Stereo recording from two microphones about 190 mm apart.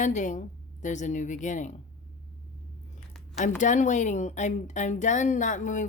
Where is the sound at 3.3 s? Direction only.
40° left (ahead or behind).